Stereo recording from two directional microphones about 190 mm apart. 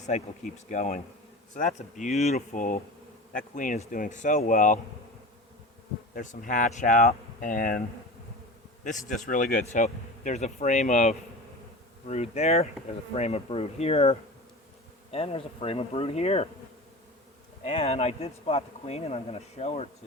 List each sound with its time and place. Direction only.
0.0 s speech: 40° left (ahead or behind)
6.1 s speech: 45° left (ahead or behind)
8.8 s speech: 40° left (ahead or behind)
17.7 s speech: 30° left (ahead or behind)